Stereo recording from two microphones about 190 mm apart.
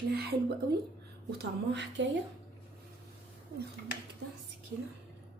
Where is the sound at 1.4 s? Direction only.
65° right (ahead or behind).